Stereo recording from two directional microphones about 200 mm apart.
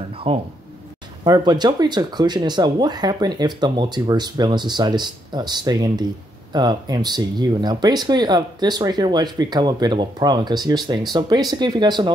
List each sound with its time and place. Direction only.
0.3 s speech: 30° right (ahead or behind)